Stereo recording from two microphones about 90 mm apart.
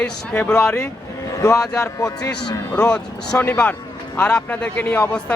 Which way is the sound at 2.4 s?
10° left (ahead or behind).